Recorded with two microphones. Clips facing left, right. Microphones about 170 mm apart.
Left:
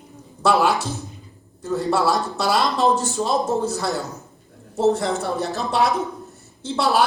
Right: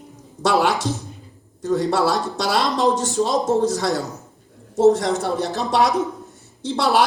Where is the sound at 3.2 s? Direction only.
75° right (ahead or behind).